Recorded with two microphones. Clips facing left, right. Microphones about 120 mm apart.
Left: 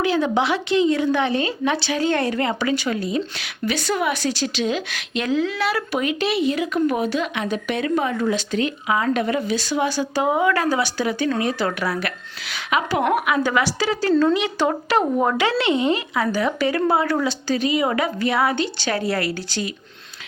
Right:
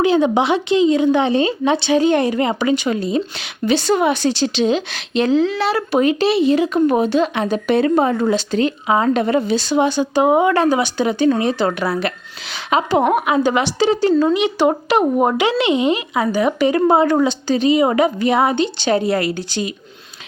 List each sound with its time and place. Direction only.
0.0 s speech: 20° right (ahead or behind)